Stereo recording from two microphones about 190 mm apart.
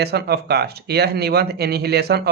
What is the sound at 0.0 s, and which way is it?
Speech, 55° right (ahead or behind).